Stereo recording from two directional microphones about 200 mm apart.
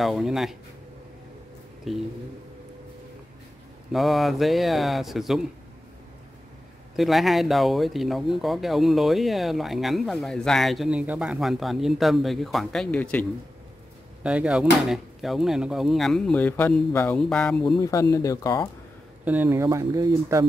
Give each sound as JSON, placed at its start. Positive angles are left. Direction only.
{"t": 0.0, "sound": "speech", "side_deg": 0}
{"t": 1.9, "sound": "speech", "side_deg": 0}
{"t": 3.9, "sound": "speech", "side_deg": 0}
{"t": 7.0, "sound": "speech", "side_deg": 0}
{"t": 14.2, "sound": "speech", "side_deg": -5}
{"t": 17.7, "sound": "speech", "side_deg": 15}
{"t": 19.2, "sound": "speech", "side_deg": -10}